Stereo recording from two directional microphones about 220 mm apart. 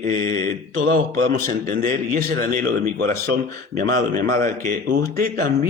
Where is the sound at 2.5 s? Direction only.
35° right (ahead or behind).